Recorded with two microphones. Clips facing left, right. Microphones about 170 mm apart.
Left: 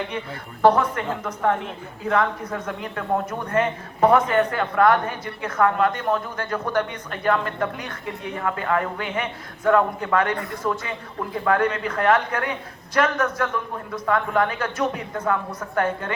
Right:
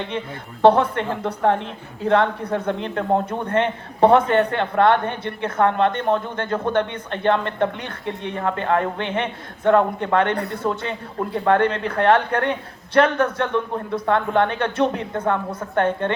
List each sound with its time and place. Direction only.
0.6 s a woman's voice: 30° right (ahead or behind)